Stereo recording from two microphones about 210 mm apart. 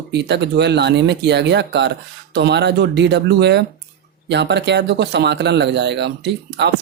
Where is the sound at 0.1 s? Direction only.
55° right (ahead or behind).